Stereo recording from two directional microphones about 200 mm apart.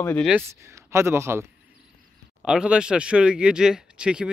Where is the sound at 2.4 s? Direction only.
5° right (ahead or behind).